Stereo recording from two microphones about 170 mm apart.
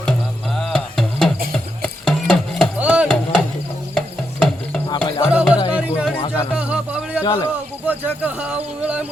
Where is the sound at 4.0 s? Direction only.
5° left (ahead or behind).